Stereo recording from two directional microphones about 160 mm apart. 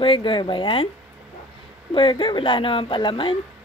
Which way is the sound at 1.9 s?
30° left (ahead or behind).